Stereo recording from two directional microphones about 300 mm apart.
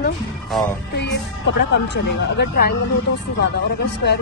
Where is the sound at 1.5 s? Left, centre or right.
Left.